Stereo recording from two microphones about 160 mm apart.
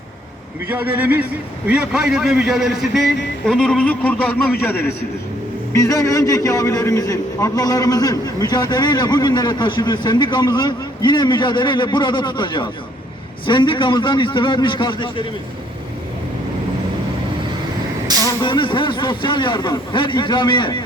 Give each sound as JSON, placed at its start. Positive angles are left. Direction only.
{"t": 0.7, "sound": "a man's voice", "side_deg": -10}
{"t": 18.3, "sound": "a man's voice", "side_deg": 25}